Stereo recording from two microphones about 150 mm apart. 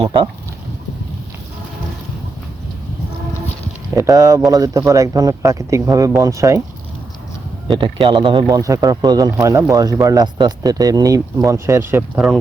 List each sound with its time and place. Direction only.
0.0 s speech: 35° right (ahead or behind)
3.9 s speech: 20° right (ahead or behind)
7.7 s speech: 35° right (ahead or behind)
8.4 s speech: 20° right (ahead or behind)